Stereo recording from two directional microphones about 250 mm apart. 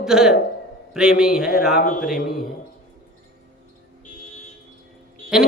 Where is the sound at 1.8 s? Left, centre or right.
Left.